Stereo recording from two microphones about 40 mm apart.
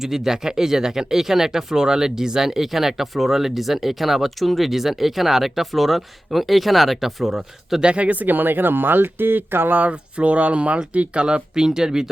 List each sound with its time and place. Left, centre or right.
0.0 s speech: centre
7.8 s speech: right
9.7 s speech: right; by 12.0 s centre